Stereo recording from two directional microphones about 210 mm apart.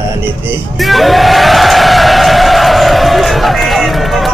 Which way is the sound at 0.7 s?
Centre (ahead or behind).